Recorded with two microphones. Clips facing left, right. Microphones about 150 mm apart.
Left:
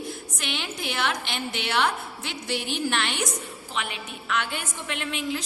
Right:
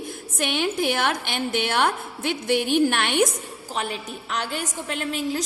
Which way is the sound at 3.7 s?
35° right (ahead or behind).